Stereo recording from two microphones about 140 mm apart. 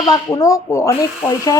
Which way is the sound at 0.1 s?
25° left (ahead or behind).